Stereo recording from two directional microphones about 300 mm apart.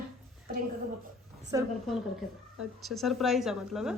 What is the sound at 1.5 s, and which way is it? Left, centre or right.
Speech, centre.